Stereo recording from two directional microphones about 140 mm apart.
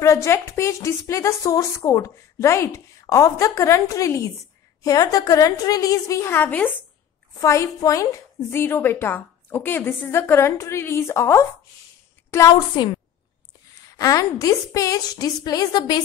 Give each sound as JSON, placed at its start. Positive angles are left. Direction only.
{"t": 0.0, "sound": "a woman's voice", "side_deg": 20}
{"t": 12.7, "sound": "a woman's voice", "side_deg": 35}
{"t": 13.9, "sound": "a woman's voice", "side_deg": 25}